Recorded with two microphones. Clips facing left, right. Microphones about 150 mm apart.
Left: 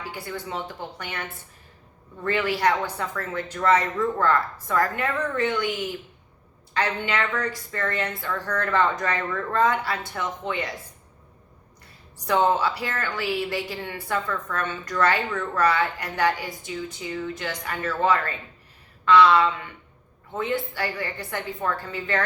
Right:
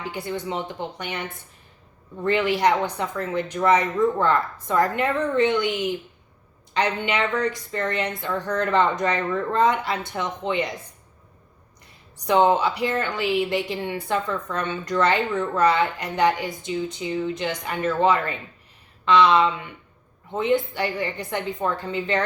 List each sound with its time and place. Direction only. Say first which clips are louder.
0.0 s a woman's voice: right 4 dB; 20° right (ahead or behind)
2.2 s a woman's voice: right 3 dB; 20° right (ahead or behind)
12.2 s a woman's voice: right 3 dB; 20° right (ahead or behind)